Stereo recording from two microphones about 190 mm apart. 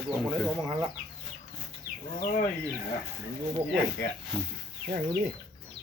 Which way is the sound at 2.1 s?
55° left (ahead or behind).